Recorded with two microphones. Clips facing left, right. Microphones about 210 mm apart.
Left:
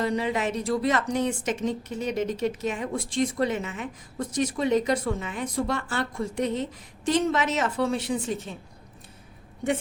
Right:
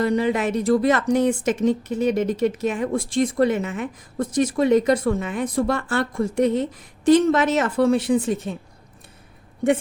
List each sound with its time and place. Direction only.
0.2 s a woman's voice: 55° right (ahead or behind)